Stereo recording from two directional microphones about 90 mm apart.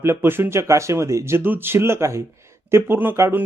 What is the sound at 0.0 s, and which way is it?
Speech, 30° right (ahead or behind).